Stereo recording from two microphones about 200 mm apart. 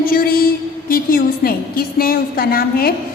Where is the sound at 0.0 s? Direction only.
45° left (ahead or behind).